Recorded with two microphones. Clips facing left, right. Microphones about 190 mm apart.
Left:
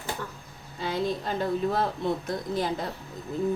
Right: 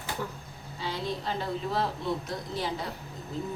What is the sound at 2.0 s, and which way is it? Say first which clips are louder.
Speech: left 3 dB; 50° left (ahead or behind).